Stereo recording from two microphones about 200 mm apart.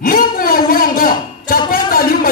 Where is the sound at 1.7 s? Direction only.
45° left (ahead or behind).